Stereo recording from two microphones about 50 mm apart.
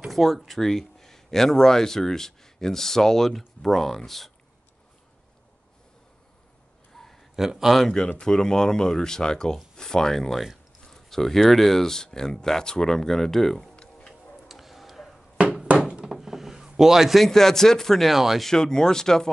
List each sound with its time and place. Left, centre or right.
0.1 s speech: centre
6.9 s a sound: centre
7.3 s a man's voice: centre
8.2 s speech: centre
14.5 s tick-tock: centre
15.7 s a sound: right
16.1 s a sound: centre
17.2 s speech: centre
18.1 s speech: centre
18.4 s speech: centre